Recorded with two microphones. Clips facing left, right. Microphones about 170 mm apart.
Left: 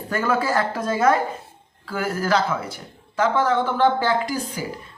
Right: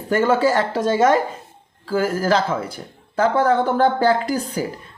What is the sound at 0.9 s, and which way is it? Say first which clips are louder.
Speech: right 3 dB; 25° right (ahead or behind).